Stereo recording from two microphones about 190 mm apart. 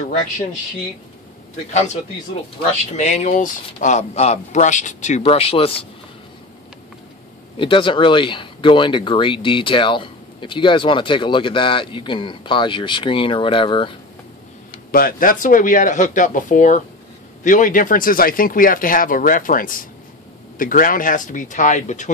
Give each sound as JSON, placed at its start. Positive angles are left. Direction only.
{"t": 3.0, "sound": "speech", "side_deg": 40}
{"t": 7.5, "sound": "speech", "side_deg": 25}
{"t": 14.9, "sound": "speech", "side_deg": 50}